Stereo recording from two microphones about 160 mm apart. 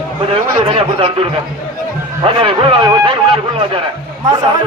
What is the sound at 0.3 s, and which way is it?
A man's voice, 35° right (ahead or behind).